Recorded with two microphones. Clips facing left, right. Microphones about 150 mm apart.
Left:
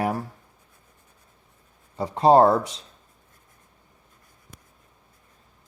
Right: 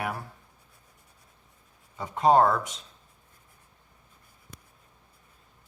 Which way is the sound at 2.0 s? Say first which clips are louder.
Left 5 dB; 35° left (ahead or behind).